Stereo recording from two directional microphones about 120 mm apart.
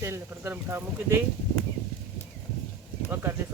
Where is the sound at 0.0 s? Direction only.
20° right (ahead or behind).